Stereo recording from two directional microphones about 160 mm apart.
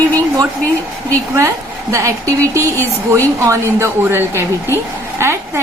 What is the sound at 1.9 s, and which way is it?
A woman's voice, 20° right (ahead or behind).